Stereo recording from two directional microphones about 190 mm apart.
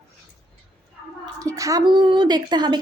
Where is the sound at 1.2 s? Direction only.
15° right (ahead or behind).